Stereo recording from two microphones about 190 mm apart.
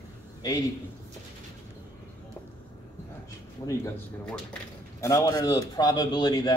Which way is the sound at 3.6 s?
20° left (ahead or behind).